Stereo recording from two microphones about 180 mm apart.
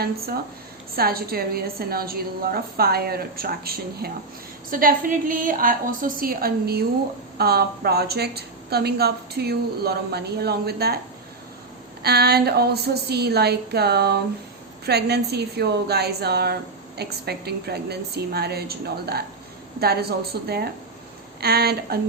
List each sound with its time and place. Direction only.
0.9 s a woman's voice: 55° right (ahead or behind)
12.0 s a woman's voice: 65° right (ahead or behind)